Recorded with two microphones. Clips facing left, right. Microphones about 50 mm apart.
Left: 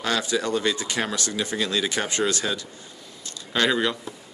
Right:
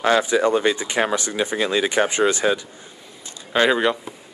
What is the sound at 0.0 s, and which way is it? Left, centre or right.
Speech, right.